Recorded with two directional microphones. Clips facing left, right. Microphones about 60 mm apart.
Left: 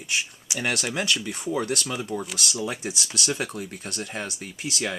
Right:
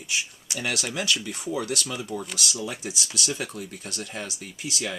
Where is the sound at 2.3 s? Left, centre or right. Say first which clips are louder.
Left 2 dB; left.